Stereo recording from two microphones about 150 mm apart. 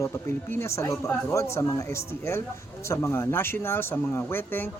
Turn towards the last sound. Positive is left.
turn(degrees=15)  # may be behind; listen again after turning